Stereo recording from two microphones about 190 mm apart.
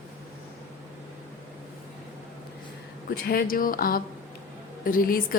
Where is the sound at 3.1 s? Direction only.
50° left (ahead or behind).